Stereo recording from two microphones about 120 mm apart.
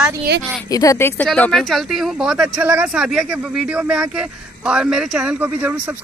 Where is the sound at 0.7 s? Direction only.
30° left (ahead or behind).